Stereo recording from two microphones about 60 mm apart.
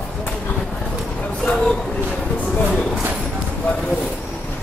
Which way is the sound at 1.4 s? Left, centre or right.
Centre.